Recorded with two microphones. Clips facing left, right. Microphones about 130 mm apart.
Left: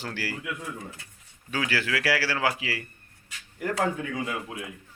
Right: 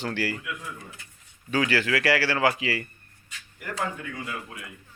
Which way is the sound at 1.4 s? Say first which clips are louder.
Right 4 dB; 10° left (ahead or behind).